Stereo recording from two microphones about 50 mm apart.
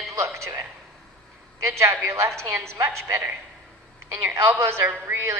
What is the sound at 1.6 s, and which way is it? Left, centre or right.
Speech, right.